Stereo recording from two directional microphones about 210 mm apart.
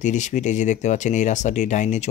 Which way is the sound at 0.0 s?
35° left (ahead or behind).